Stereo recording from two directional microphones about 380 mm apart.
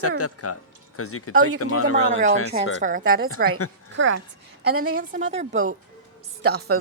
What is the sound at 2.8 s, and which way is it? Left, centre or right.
Speech, centre.